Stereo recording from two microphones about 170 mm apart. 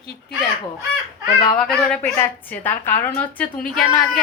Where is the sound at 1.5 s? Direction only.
Centre (ahead or behind).